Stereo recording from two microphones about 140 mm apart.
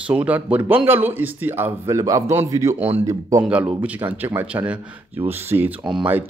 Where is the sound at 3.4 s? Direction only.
10° right (ahead or behind).